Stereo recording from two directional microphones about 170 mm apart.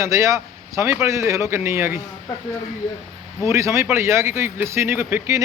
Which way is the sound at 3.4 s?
15° right (ahead or behind).